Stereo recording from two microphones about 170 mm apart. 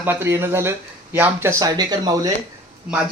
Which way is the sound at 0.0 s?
15° right (ahead or behind).